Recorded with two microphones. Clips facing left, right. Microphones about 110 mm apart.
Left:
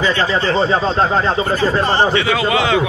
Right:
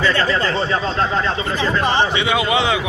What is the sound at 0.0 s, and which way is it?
Speech, 25° left (ahead or behind).